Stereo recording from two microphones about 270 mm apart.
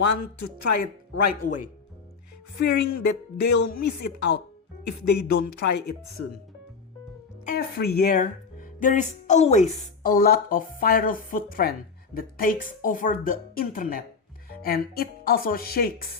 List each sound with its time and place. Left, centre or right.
0.0 s speech: left
2.6 s speech: left
7.4 s a woman's voice: left